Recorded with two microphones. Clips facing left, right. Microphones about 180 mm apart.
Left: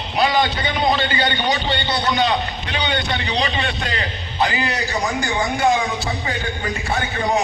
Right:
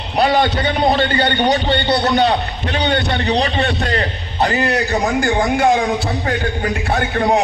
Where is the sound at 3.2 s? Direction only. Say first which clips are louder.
Right 6 dB; 40° right (ahead or behind).